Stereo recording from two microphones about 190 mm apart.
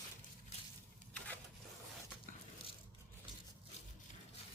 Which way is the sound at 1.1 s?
5° left (ahead or behind).